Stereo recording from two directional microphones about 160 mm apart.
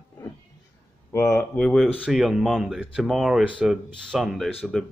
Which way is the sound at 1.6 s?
Centre (ahead or behind).